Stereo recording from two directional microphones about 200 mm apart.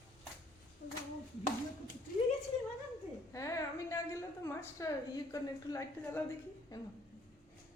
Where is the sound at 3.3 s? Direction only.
15° left (ahead or behind).